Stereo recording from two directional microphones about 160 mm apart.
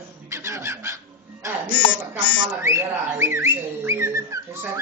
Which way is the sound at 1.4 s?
20° right (ahead or behind).